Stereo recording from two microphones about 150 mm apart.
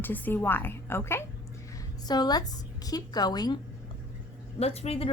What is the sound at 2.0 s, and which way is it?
A woman's voice, 25° left (ahead or behind).